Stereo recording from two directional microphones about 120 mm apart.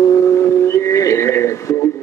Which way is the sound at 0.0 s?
25° left (ahead or behind).